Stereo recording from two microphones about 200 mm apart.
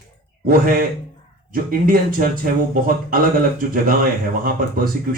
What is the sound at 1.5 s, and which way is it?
Speech, 45° right (ahead or behind).